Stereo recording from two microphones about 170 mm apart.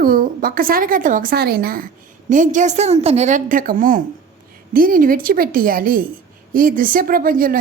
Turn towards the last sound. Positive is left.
turn(degrees=-55)  # may be behind; listen again after turning